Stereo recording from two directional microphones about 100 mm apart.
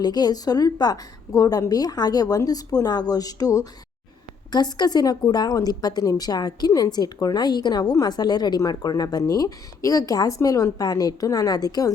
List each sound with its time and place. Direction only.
0.0 s speech: 45° left (ahead or behind)